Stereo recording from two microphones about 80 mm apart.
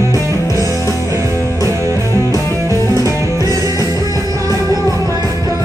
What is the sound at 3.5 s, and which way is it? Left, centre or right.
Music, right.